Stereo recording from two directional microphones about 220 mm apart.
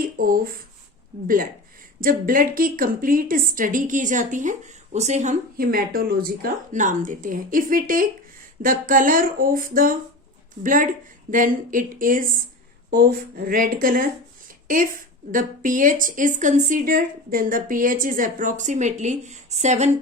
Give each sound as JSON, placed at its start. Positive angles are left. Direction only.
{"t": 0.0, "sound": "a sound", "side_deg": -40}
{"t": 2.0, "sound": "a woman's voice", "side_deg": -40}
{"t": 15.3, "sound": "a woman's voice", "side_deg": -35}